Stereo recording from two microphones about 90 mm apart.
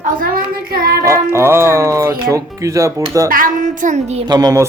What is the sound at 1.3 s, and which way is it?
Speech, 30° right (ahead or behind).